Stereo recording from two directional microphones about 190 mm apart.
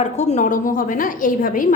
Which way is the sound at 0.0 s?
35° left (ahead or behind).